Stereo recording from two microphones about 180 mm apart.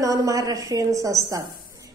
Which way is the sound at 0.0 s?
20° right (ahead or behind).